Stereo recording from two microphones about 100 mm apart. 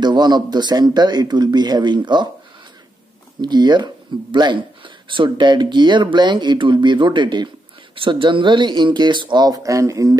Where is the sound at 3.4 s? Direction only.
45° right (ahead or behind).